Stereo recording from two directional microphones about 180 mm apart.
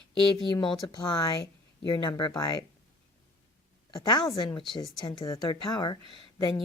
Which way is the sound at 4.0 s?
20° left (ahead or behind).